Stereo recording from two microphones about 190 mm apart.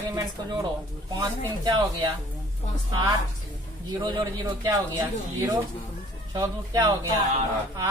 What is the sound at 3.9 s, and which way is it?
Speech, 20° right (ahead or behind).